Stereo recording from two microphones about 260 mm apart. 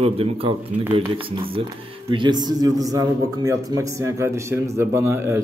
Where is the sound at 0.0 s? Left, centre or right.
Right.